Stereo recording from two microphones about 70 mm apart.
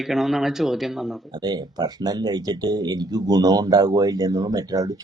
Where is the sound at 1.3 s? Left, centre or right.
Right.